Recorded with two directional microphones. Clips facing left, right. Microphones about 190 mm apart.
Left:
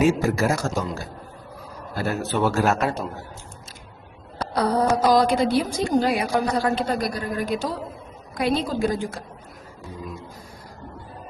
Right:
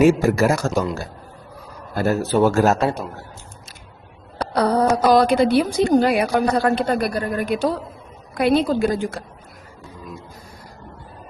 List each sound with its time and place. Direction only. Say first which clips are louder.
0.0 s a woman's voice: right 5 dB; 65° right (ahead or behind)
2.0 s a man's voice: right 6 dB; 40° right (ahead or behind)
4.4 s a sound: right 3 dB; 65° right (ahead or behind)
5.0 s a woman's voice: right 4 dB; 65° right (ahead or behind)